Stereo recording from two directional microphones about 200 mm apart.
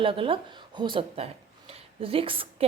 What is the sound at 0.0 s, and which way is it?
A woman's voice, 25° right (ahead or behind).